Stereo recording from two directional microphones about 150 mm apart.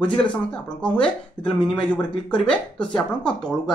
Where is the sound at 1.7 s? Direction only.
5° left (ahead or behind).